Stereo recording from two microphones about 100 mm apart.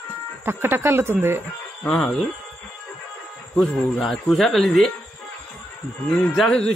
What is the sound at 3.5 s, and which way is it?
Speech, centre (ahead or behind).